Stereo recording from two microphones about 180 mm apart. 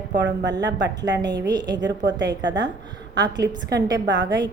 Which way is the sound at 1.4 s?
20° right (ahead or behind).